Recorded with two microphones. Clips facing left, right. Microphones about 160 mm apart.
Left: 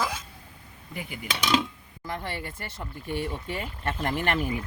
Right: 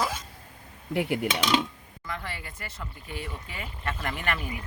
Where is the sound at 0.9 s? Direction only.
70° right (ahead or behind).